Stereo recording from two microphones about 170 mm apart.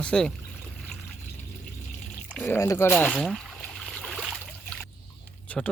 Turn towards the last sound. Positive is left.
turn(degrees=10)  # may be behind; listen again after turning